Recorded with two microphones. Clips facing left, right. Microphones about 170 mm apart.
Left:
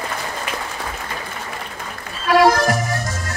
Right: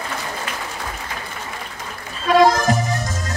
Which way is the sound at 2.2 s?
25° right (ahead or behind).